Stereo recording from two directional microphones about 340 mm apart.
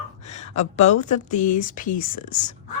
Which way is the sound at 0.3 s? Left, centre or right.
Centre.